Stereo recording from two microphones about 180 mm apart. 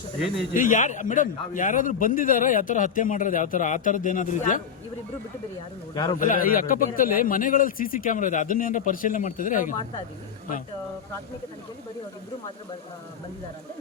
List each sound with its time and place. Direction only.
0.5 s a man's voice: 45° left (ahead or behind)
5.9 s a man's voice: 20° left (ahead or behind)
6.1 s a man's voice: 50° left (ahead or behind)